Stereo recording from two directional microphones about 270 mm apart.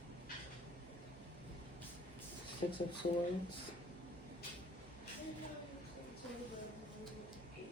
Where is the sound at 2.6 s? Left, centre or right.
Left.